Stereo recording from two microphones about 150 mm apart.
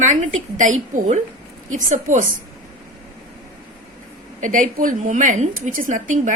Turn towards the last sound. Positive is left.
turn(degrees=-60)  # may be behind; listen again after turning